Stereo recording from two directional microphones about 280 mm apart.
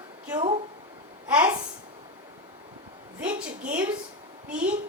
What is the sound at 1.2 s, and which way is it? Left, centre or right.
Speech, centre.